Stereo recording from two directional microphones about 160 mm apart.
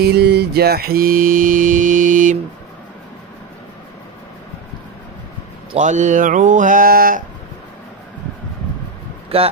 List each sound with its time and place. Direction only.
0.0 s mantra: 90° right; by 2.3 s 55° right (ahead or behind)
5.8 s mantra: 50° right (ahead or behind)
9.3 s speech: 35° right (ahead or behind)